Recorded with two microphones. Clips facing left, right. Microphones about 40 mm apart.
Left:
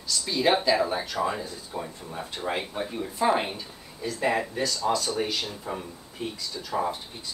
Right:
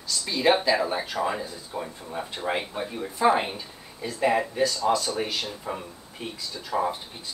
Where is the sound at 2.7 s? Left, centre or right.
Centre.